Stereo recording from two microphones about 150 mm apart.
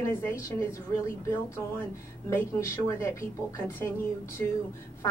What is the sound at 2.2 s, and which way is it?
A woman's voice, 20° left (ahead or behind).